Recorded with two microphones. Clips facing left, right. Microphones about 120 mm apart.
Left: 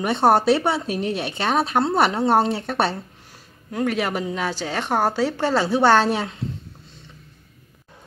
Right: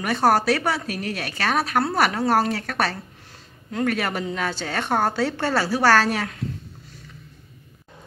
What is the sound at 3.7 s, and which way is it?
A woman's voice, 15° left (ahead or behind).